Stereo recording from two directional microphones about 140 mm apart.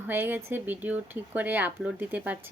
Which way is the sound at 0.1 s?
15° right (ahead or behind).